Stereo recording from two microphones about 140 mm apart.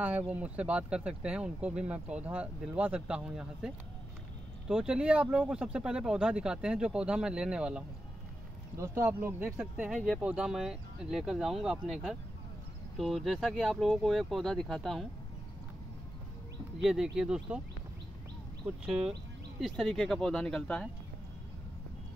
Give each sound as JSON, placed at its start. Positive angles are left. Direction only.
{"t": 0.3, "sound": "speech", "side_deg": -10}
{"t": 8.7, "sound": "speech", "side_deg": -20}
{"t": 9.6, "sound": "speech", "side_deg": -5}
{"t": 16.8, "sound": "speech", "side_deg": -5}
{"t": 18.7, "sound": "speech", "side_deg": -5}